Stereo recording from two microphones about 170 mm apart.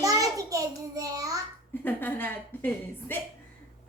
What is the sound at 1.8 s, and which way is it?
A woman's voice, 10° left (ahead or behind).